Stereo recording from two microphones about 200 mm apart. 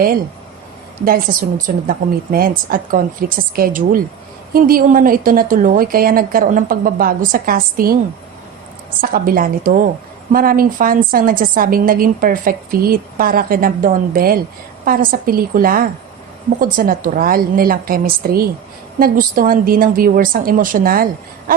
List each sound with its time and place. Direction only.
1.0 s a woman's voice: 45° right (ahead or behind)
9.0 s a woman's voice: 45° right (ahead or behind)